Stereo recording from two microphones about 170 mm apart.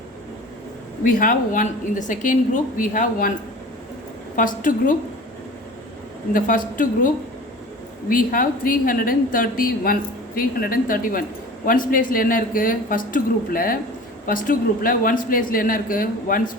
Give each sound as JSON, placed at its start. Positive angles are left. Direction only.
{"t": 1.0, "sound": "a woman's voice", "side_deg": 55}
{"t": 4.4, "sound": "a woman's voice", "side_deg": 50}
{"t": 6.3, "sound": "a woman's voice", "side_deg": 50}
{"t": 8.1, "sound": "a woman's voice", "side_deg": 55}